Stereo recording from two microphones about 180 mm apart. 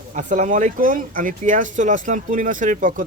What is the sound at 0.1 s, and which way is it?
Speech, 45° right (ahead or behind).